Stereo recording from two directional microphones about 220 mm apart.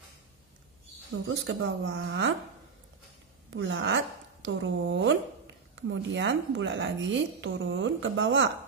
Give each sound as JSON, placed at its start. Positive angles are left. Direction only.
{"t": 1.1, "sound": "a woman's voice", "side_deg": -60}
{"t": 3.4, "sound": "a woman's voice", "side_deg": -55}